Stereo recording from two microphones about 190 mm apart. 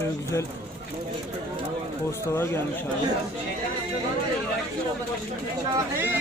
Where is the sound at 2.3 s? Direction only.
15° left (ahead or behind).